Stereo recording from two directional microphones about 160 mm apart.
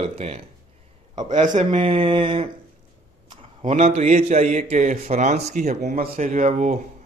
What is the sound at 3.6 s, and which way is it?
A man's voice, 45° right (ahead or behind).